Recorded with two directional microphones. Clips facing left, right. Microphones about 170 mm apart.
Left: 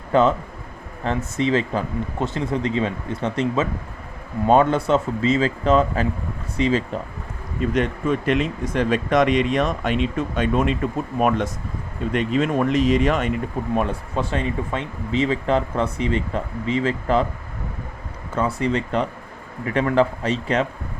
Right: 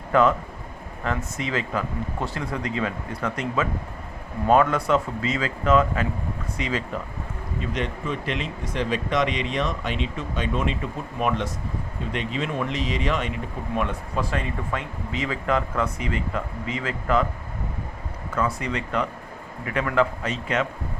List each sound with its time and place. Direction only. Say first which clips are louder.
0.1 s speech: left 2 dB; 25° left (ahead or behind)
7.6 s speech: left 8 dB; 50° left (ahead or behind)
13.7 s speech: left 2 dB; 30° left (ahead or behind)
18.3 s speech: left 5 dB; 30° left (ahead or behind)